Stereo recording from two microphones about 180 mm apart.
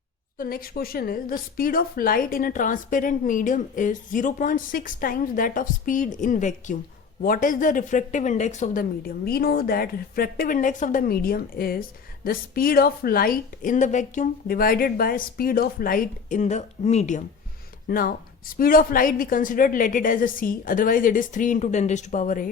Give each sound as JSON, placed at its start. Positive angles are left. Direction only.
{"t": 0.3, "sound": "speech", "side_deg": 55}
{"t": 17.8, "sound": "speech", "side_deg": 50}